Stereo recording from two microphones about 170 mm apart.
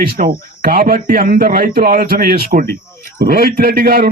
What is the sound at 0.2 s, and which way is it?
Speech, 45° right (ahead or behind).